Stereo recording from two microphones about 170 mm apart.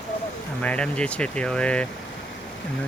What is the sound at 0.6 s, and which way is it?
Speech, 5° left (ahead or behind).